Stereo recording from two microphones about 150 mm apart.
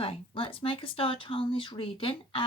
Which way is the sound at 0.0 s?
35° left (ahead or behind).